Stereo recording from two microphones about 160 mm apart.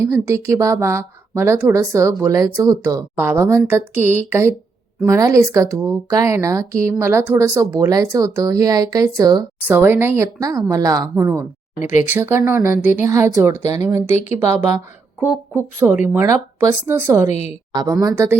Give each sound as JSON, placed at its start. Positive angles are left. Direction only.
{"t": 0.0, "sound": "a woman's voice", "side_deg": -15}
{"t": 9.6, "sound": "a woman's voice", "side_deg": -10}
{"t": 11.8, "sound": "speech", "side_deg": 50}
{"t": 12.0, "sound": "a woman's voice", "side_deg": -15}
{"t": 12.7, "sound": "a woman's voice", "side_deg": 55}
{"t": 13.0, "sound": "a woman's voice", "side_deg": -15}
{"t": 17.2, "sound": "speech", "side_deg": 45}
{"t": 18.0, "sound": "a woman's voice", "side_deg": -15}